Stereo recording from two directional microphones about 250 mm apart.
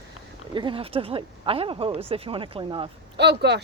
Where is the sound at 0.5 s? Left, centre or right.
Centre.